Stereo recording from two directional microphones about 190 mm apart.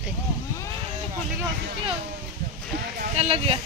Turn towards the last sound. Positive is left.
turn(degrees=-30)  # may be behind; listen again after turning